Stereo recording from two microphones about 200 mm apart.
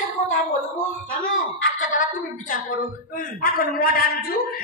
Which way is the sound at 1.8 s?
40° left (ahead or behind).